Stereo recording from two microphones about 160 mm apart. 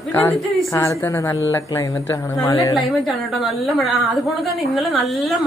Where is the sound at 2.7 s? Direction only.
Centre (ahead or behind).